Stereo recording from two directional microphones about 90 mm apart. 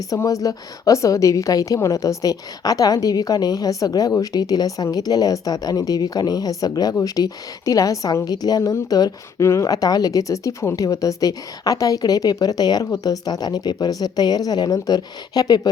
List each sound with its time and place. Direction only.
0.1 s a woman's voice: 40° left (ahead or behind)